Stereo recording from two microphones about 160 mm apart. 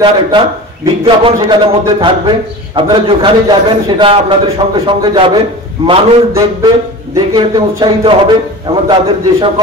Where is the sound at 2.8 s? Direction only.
30° right (ahead or behind).